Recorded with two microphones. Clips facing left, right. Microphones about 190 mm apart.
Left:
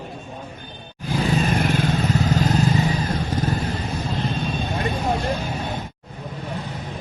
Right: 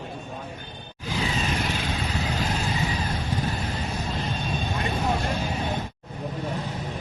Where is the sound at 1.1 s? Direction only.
55° left (ahead or behind).